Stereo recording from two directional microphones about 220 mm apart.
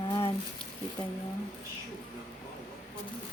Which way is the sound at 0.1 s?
25° left (ahead or behind).